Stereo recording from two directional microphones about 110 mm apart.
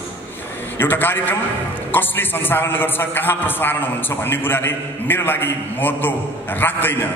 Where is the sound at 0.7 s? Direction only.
20° left (ahead or behind).